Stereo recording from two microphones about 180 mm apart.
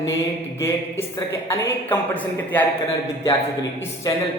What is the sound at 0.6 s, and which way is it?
A man's voice, 15° left (ahead or behind).